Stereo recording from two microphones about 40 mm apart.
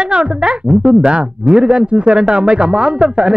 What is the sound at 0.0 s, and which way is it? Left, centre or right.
A woman's voice, right.